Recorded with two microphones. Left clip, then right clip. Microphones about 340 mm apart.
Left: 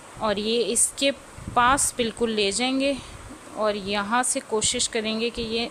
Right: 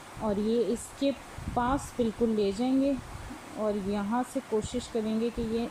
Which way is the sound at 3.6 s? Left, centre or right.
Left.